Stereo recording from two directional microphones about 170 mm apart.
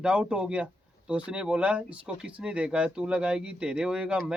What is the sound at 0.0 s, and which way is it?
Speech, 5° right (ahead or behind).